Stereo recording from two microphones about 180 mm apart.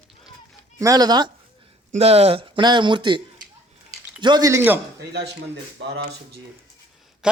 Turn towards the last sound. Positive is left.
turn(degrees=-5)  # may be behind; listen again after turning